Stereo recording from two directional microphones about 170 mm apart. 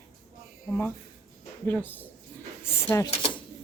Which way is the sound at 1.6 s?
10° left (ahead or behind).